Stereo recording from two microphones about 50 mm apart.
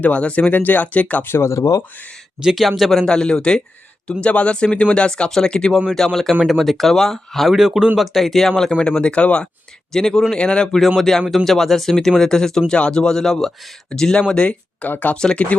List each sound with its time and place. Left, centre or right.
0.0 s speech: left
0.5 s speech: left
1.2 s speech: left
1.5 s speech: left
2.4 s speech: centre
3.1 s speech: centre
8.8 s speech: left
9.9 s speech: centre
10.3 s speech: left
10.8 s speech: centre; by 14.8 s left
14.8 s speech: left
15.1 s speech: centre